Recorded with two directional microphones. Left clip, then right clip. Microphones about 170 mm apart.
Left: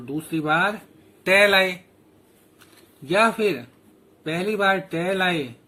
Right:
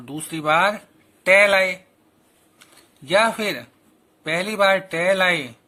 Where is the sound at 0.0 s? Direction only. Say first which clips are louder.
Right 1 dB; 45° right (ahead or behind).